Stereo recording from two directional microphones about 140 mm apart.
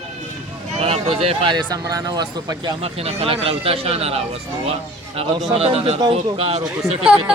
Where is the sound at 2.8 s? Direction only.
45° right (ahead or behind).